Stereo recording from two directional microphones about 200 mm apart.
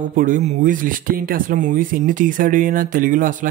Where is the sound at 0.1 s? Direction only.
40° right (ahead or behind).